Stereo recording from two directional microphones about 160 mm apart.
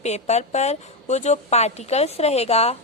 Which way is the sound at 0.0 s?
45° left (ahead or behind).